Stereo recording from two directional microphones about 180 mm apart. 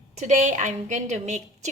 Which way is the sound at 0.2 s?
40° right (ahead or behind).